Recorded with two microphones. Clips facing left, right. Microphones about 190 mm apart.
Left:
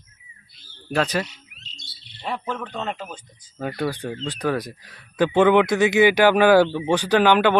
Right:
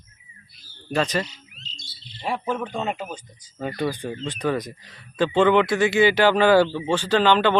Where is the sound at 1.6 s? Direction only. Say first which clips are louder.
Right 2 dB; 65° left (ahead or behind).